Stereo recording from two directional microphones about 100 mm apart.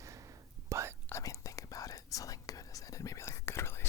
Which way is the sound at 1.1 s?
35° left (ahead or behind).